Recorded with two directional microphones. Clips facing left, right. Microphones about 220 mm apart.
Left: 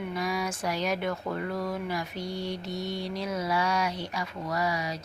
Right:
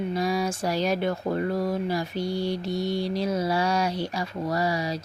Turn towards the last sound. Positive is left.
turn(degrees=-30)  # may be behind; listen again after turning